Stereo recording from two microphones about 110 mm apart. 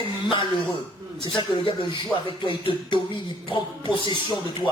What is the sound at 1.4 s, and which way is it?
Speech, 50° left (ahead or behind).